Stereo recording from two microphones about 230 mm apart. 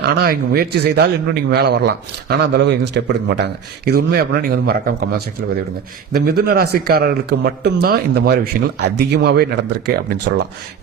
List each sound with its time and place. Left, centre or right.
0.0 s a man's voice: right